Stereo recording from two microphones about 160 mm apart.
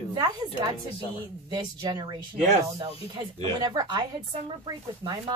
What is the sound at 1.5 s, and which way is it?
A woman's voice, 30° right (ahead or behind).